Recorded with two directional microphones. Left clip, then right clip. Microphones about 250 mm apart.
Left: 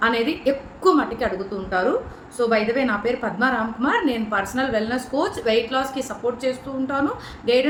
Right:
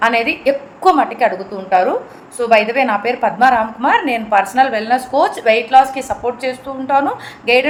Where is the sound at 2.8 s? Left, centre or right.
Centre.